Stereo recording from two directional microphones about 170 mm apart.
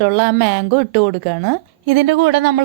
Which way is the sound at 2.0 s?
90° right.